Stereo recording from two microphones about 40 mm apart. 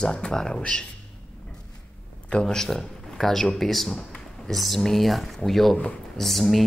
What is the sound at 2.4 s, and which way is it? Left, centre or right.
Speech, centre.